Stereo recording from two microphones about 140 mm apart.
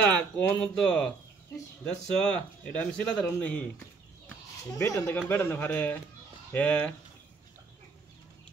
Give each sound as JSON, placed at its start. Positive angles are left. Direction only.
{"t": 0.0, "sound": "speech", "side_deg": 10}
{"t": 2.2, "sound": "speech", "side_deg": 10}
{"t": 4.6, "sound": "speech", "side_deg": 20}